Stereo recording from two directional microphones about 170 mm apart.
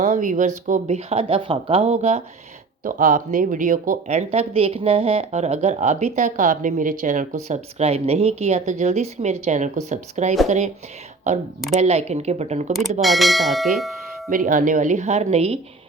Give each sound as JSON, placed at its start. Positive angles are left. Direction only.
{"t": 0.0, "sound": "speech", "side_deg": -45}
{"t": 2.8, "sound": "speech", "side_deg": -50}
{"t": 11.7, "sound": "speech", "side_deg": -40}
{"t": 13.0, "sound": "speech", "side_deg": 0}
{"t": 14.3, "sound": "speech", "side_deg": -50}